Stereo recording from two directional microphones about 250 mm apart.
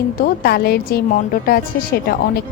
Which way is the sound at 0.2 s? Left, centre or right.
Left.